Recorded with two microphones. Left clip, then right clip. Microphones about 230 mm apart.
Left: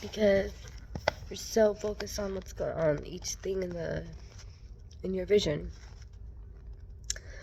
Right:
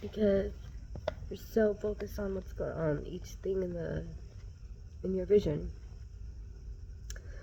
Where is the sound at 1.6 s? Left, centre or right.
Left.